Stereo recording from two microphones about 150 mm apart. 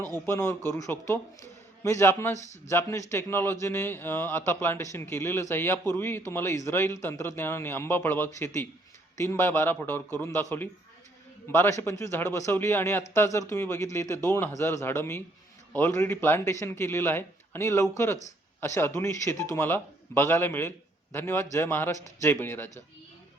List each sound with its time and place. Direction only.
0.3 s a man's voice: 15° left (ahead or behind)